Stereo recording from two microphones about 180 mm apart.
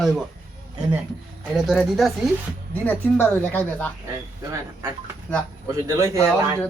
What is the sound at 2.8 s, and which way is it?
Speech, 10° left (ahead or behind).